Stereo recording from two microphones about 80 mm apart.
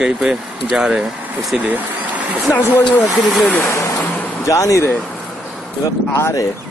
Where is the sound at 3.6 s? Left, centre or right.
Left.